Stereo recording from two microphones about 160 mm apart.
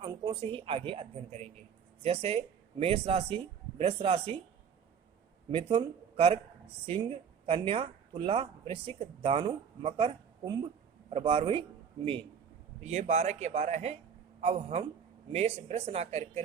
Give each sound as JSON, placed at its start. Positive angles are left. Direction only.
{"t": 0.0, "sound": "speech", "side_deg": -30}
{"t": 5.5, "sound": "speech", "side_deg": -35}
{"t": 12.8, "sound": "speech", "side_deg": -45}